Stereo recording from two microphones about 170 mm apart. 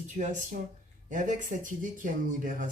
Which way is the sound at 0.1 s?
50° right (ahead or behind).